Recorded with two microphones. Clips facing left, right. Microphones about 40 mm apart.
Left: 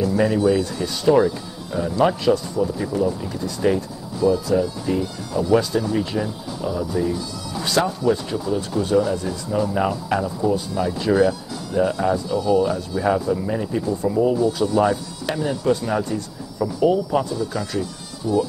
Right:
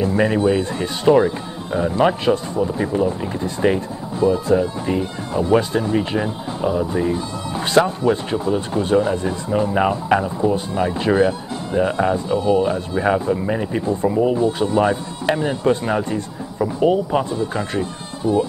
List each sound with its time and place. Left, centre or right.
0.0 s speech: right